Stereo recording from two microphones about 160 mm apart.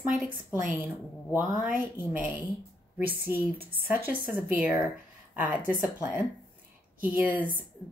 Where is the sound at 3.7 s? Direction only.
65° right (ahead or behind).